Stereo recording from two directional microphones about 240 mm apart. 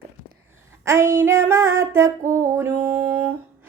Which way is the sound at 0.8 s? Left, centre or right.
Centre.